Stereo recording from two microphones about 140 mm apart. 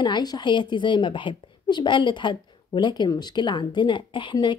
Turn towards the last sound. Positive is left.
turn(degrees=35)  # may be behind; listen again after turning